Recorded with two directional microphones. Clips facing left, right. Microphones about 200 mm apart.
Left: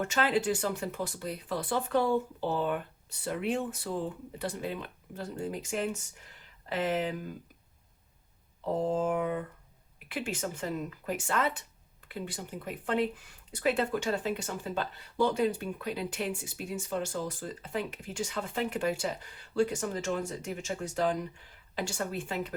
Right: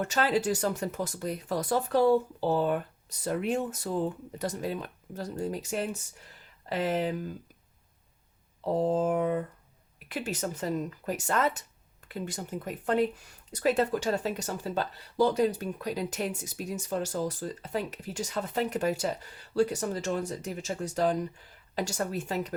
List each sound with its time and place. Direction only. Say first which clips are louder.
0.0 s speech: right 1 dB; 40° right (ahead or behind)
8.6 s speech: right 3 dB; 35° right (ahead or behind)